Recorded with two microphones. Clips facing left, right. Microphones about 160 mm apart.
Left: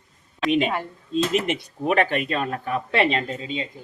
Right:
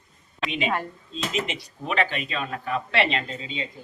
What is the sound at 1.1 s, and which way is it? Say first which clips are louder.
Speech: left 7 dB; 50° left (ahead or behind).